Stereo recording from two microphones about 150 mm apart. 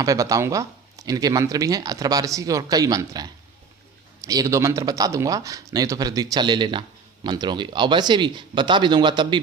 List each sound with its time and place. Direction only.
0.0 s speech: 25° right (ahead or behind)